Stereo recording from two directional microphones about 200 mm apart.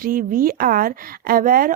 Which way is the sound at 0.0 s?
45° right (ahead or behind).